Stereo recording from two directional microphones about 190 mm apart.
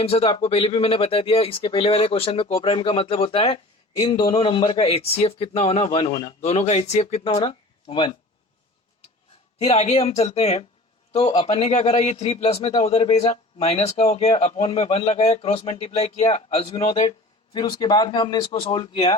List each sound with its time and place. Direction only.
0.0 s speech: 30° left (ahead or behind)
9.6 s speech: 35° left (ahead or behind)